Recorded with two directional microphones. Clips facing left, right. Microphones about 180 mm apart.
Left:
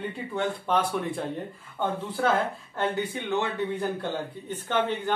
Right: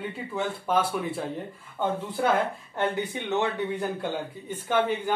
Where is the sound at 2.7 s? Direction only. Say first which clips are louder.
Even; 20° right (ahead or behind).